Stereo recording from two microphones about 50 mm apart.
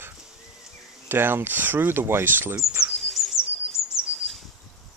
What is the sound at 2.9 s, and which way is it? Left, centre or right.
Bird, centre.